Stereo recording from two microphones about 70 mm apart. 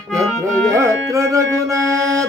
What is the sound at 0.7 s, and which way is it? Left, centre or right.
Music, right.